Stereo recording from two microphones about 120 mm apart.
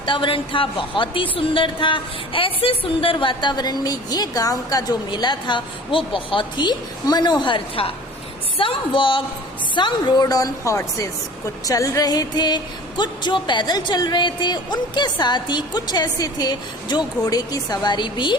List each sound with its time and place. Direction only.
0.0 s a woman's voice: 45° left (ahead or behind); by 11.1 s 25° left (ahead or behind)
11.6 s music: 30° left (ahead or behind)